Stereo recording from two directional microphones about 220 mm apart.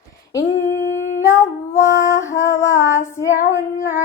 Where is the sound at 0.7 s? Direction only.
60° left (ahead or behind).